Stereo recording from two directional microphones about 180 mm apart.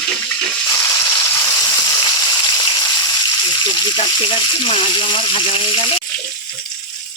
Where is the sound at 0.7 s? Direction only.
15° left (ahead or behind).